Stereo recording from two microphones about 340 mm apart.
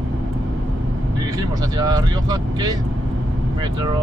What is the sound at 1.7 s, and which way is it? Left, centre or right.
Speech, centre.